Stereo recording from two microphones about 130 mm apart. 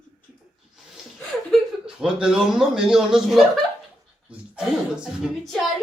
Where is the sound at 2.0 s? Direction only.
5° right (ahead or behind).